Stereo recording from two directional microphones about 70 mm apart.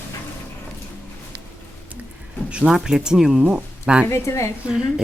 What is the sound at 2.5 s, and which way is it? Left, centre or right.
Speech, centre.